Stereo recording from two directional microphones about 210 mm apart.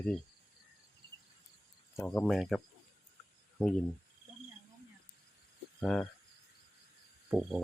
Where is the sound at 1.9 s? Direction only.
5° left (ahead or behind).